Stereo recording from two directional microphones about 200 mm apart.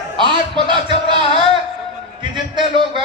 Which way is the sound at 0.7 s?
25° right (ahead or behind).